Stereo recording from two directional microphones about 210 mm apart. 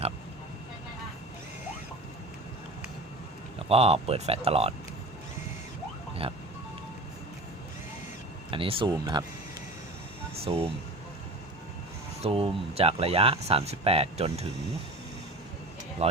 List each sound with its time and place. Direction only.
3.7 s speech: 30° right (ahead or behind)
6.2 s speech: 25° right (ahead or behind)
8.4 s speech: 25° right (ahead or behind)
10.5 s speech: 25° right (ahead or behind)
12.2 s speech: 30° right (ahead or behind)
16.0 s speech: 30° right (ahead or behind)